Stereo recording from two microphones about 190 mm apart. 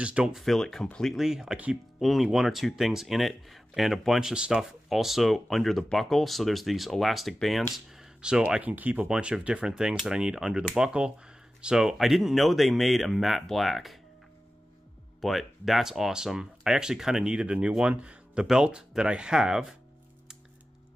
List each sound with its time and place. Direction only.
0.0 s speech: 5° right (ahead or behind)
15.1 s speech: centre (ahead or behind)